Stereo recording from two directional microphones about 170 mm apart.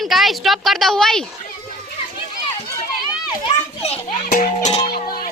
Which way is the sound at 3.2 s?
35° left (ahead or behind).